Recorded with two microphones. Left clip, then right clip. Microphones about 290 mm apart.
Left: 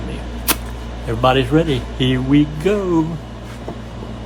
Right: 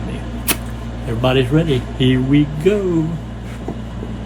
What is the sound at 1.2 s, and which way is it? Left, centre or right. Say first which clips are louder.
Speech: left 2 dB; centre.